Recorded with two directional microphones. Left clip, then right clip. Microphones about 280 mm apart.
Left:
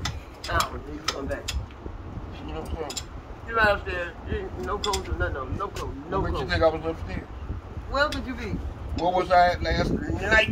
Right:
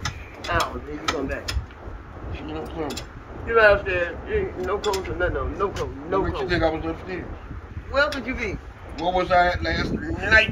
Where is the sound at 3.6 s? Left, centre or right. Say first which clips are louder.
Right 6 dB; left.